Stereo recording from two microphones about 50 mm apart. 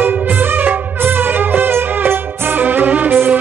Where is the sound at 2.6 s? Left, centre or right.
Right.